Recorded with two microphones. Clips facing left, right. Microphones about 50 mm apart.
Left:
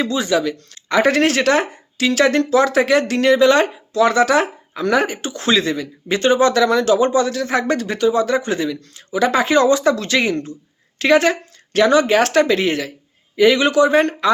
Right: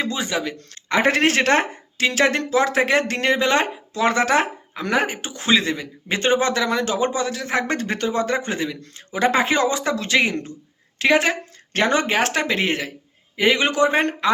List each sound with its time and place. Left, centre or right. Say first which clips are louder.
0.0 s a woman's voice: left 6 dB; right
11.7 s speech: left 6 dB; right